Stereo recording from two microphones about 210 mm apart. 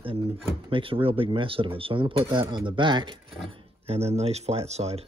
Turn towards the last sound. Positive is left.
turn(degrees=-30)  # may be behind; listen again after turning